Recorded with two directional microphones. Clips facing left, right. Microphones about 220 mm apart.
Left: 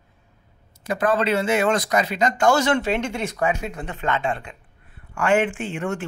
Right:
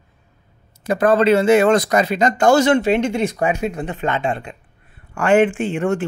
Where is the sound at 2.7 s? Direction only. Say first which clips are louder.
Right 6 dB; 15° right (ahead or behind).